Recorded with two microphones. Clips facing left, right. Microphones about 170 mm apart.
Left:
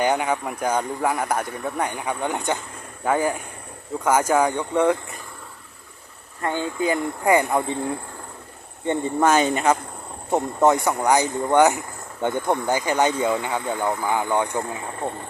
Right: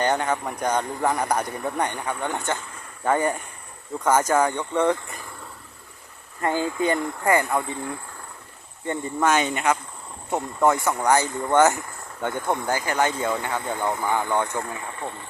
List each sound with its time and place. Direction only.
0.0 s speech: 10° left (ahead or behind)
6.4 s speech: 5° right (ahead or behind)
7.3 s speech: 20° left (ahead or behind)
9.2 s speech: 35° left (ahead or behind)
10.3 s speech: 20° left (ahead or behind)